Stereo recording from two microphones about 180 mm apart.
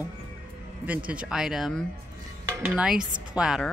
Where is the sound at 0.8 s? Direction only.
10° right (ahead or behind).